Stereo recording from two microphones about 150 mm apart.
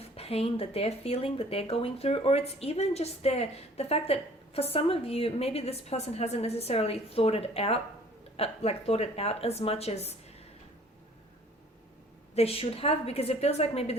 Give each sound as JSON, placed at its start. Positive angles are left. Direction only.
{"t": 0.2, "sound": "speech", "side_deg": 40}
{"t": 12.3, "sound": "speech", "side_deg": 40}